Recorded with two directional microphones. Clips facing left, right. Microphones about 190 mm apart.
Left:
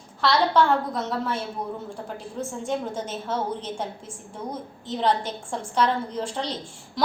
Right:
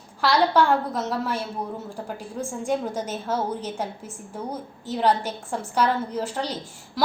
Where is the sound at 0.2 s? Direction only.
10° right (ahead or behind).